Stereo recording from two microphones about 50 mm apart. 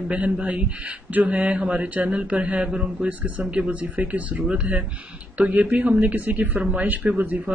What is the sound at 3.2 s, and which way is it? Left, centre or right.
Speech, right.